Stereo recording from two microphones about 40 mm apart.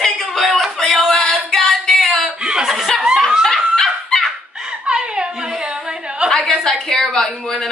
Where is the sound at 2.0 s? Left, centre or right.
Centre.